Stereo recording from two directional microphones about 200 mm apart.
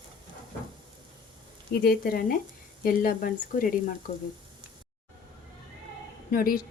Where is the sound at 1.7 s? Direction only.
50° left (ahead or behind).